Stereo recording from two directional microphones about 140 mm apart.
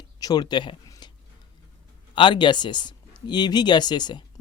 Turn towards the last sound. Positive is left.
turn(degrees=30)  # may be behind; listen again after turning